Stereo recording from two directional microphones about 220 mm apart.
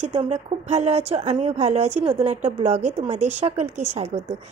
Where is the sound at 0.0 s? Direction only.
25° right (ahead or behind).